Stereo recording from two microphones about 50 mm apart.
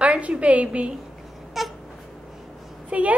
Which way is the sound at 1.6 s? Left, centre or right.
Centre.